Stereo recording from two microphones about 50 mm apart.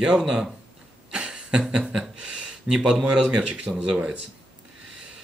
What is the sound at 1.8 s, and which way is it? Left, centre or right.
Speech, centre.